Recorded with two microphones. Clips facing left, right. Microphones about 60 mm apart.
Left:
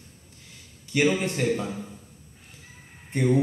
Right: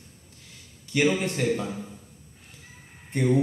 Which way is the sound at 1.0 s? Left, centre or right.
Centre.